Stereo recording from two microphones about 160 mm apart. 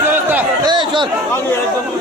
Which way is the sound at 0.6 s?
30° right (ahead or behind).